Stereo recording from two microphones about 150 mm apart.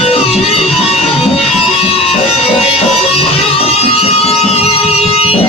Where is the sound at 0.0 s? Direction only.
40° left (ahead or behind).